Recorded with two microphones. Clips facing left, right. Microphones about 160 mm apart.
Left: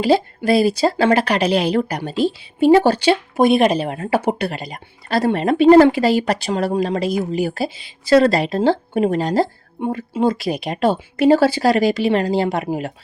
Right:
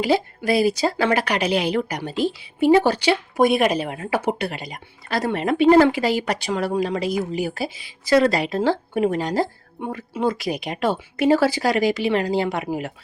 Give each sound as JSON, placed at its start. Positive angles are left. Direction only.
{"t": 0.0, "sound": "speech", "side_deg": 30}